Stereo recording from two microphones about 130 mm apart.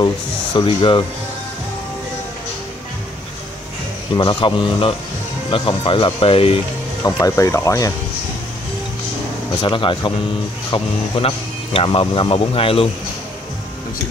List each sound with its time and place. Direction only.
0.0 s speech: 35° left (ahead or behind)
4.1 s a man's voice: 35° left (ahead or behind)
7.0 s speech: 20° left (ahead or behind)
9.6 s a man's voice: 40° left (ahead or behind)